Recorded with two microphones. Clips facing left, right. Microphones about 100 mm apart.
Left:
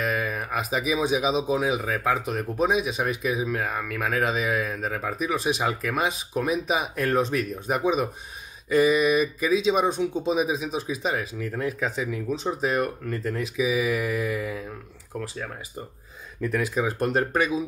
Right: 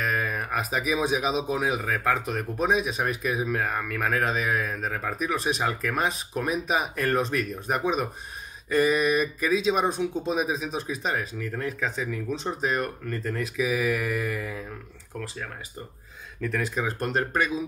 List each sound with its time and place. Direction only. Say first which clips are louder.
0.0 s speech: left 1 dB; centre (ahead or behind)
16.4 s speech: left 3 dB; 10° left (ahead or behind)